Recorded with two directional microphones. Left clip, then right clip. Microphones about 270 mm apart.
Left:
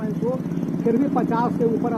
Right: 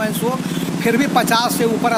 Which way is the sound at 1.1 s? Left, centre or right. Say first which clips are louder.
Right 7 dB; right.